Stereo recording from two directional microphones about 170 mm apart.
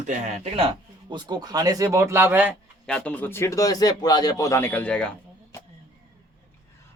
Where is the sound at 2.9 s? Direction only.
5° left (ahead or behind).